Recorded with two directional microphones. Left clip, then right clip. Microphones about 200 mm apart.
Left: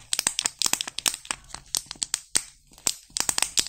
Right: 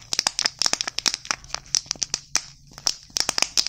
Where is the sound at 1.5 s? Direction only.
30° right (ahead or behind).